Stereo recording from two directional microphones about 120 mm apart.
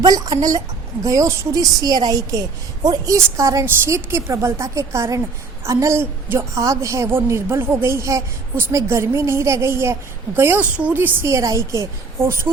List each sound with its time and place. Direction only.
0.0 s a woman's voice: 30° right (ahead or behind)